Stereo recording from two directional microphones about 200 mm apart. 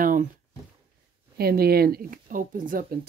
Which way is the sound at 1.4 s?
50° right (ahead or behind).